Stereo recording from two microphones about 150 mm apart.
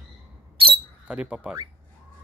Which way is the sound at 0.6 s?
35° right (ahead or behind).